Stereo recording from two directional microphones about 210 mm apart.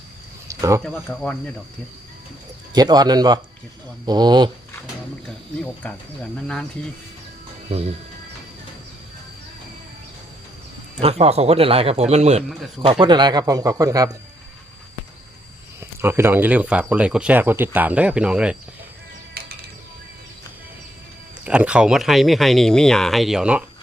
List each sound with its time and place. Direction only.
0.4 s a sound: 15° right (ahead or behind)
0.8 s speech: 5° left (ahead or behind)
2.7 s speech: 20° right (ahead or behind)
5.8 s speech: 5° left (ahead or behind)
7.7 s speech: 30° right (ahead or behind)
11.0 s speech: 30° right (ahead or behind)
15.8 s speech: 10° right (ahead or behind)
19.4 s music: 50° right (ahead or behind)
21.4 s speech: 5° right (ahead or behind)